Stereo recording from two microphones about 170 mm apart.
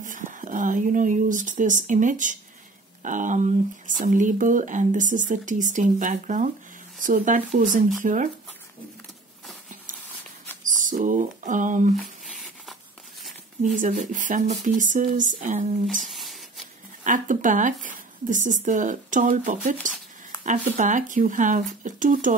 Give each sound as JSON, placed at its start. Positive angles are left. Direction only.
{"t": 0.0, "sound": "speech", "side_deg": -50}
{"t": 10.6, "sound": "speech", "side_deg": -50}
{"t": 12.3, "sound": "a sound", "side_deg": 0}
{"t": 13.7, "sound": "speech", "side_deg": -50}
{"t": 16.0, "sound": "a sound", "side_deg": 0}
{"t": 17.0, "sound": "speech", "side_deg": -50}